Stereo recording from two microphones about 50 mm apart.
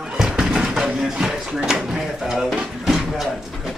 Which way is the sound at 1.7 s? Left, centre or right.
Centre.